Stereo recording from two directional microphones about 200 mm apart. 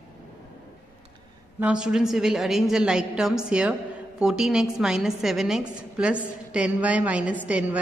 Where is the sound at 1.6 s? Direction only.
5° right (ahead or behind).